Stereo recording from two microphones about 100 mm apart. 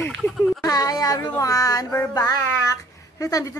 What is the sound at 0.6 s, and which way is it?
A woman's voice, 40° left (ahead or behind).